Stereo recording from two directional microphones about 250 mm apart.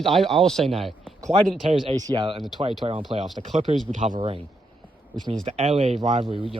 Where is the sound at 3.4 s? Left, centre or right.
Right.